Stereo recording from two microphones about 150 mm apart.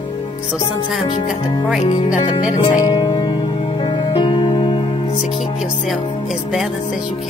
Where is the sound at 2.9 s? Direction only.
30° left (ahead or behind).